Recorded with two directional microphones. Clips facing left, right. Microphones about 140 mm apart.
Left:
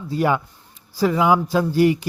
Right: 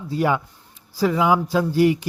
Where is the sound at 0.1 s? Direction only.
45° left (ahead or behind).